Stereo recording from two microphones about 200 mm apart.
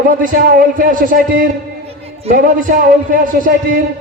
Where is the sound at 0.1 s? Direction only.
45° right (ahead or behind).